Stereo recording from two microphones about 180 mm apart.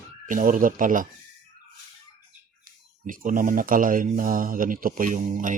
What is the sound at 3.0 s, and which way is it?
Speech, 45° right (ahead or behind).